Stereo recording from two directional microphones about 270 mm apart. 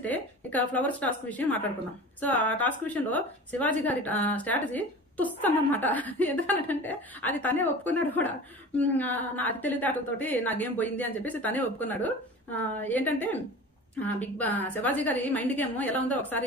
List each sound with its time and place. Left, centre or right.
0.0 s a woman's voice: centre